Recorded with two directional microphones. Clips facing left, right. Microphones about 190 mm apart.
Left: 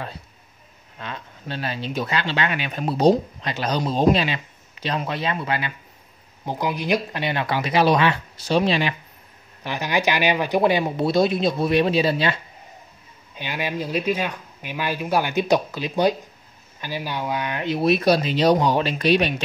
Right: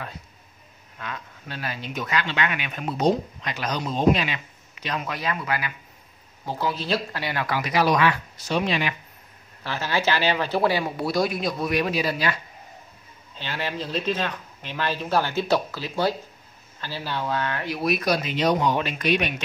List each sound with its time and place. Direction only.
0.9 s speech: 30° left (ahead or behind)
6.4 s speech: 15° left (ahead or behind)
9.6 s speech: 15° left (ahead or behind)
13.3 s speech: 15° left (ahead or behind); by 19.4 s 30° left (ahead or behind)